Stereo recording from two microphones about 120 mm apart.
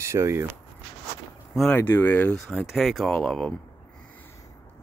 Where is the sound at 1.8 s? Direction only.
15° left (ahead or behind).